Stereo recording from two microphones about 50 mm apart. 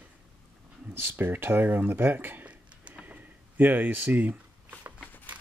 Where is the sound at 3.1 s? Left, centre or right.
Right.